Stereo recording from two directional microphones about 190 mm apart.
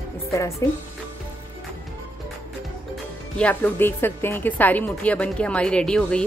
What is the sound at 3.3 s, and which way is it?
A woman's voice, 10° left (ahead or behind).